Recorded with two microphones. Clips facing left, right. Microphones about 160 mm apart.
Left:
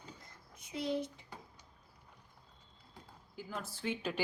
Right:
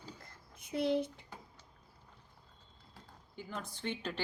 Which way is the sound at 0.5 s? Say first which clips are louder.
Right 4 dB; 55° right (ahead or behind).